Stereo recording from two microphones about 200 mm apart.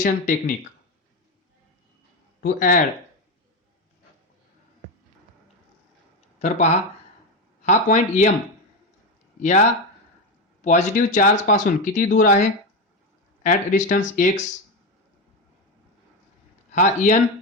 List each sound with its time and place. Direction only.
0.0 s speech: 40° left (ahead or behind)
2.4 s speech: 40° left (ahead or behind)
6.4 s speech: 35° left (ahead or behind)
9.4 s speech: 40° left (ahead or behind)
16.7 s speech: 40° left (ahead or behind)